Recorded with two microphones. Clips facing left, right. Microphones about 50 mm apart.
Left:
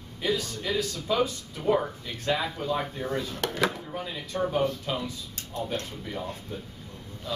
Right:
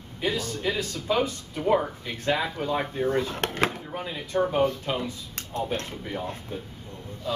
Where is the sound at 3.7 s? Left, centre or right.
Right.